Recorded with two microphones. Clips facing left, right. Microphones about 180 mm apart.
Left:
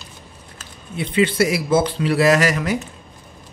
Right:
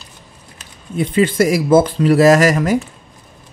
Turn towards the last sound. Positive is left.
turn(degrees=-45)  # may be behind; listen again after turning